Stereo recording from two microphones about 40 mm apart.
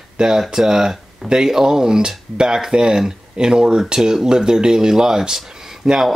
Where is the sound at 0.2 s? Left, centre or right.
Centre.